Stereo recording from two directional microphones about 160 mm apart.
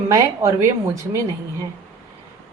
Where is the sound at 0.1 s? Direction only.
15° right (ahead or behind).